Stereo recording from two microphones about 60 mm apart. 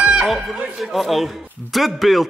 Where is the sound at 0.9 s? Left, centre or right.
Centre.